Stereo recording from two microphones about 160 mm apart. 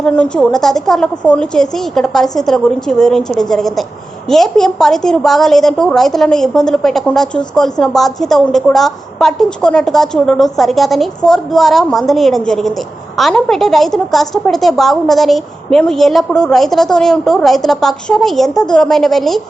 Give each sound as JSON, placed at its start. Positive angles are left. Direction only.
{"t": 0.0, "sound": "a woman's voice", "side_deg": 5}